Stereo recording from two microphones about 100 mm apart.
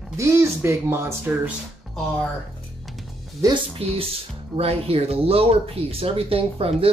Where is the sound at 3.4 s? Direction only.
35° right (ahead or behind).